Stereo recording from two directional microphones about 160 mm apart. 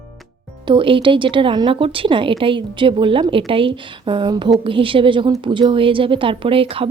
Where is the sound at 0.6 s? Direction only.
30° right (ahead or behind).